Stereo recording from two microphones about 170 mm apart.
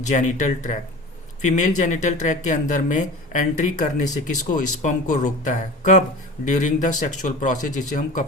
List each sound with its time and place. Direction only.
0.1 s speech: 45° left (ahead or behind)